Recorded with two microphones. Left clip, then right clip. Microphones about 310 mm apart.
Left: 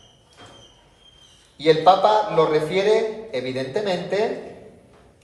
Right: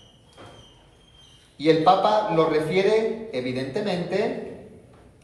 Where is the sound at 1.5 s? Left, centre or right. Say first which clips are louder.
Left 3 dB; left.